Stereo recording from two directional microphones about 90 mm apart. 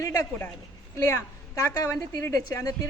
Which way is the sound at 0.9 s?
30° left (ahead or behind).